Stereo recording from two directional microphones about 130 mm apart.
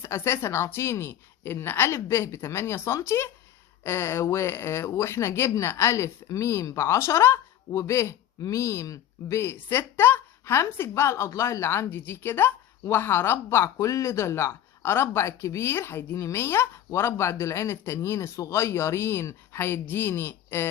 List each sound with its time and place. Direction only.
0.0 s speech: 20° left (ahead or behind)